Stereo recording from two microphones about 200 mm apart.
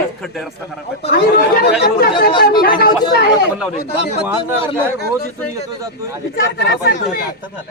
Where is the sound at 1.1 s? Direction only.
55° left (ahead or behind).